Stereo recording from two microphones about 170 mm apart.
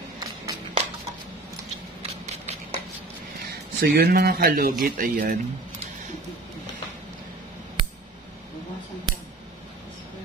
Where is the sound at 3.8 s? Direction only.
65° right (ahead or behind).